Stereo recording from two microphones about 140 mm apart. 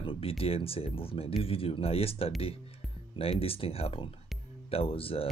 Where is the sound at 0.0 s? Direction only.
40° left (ahead or behind).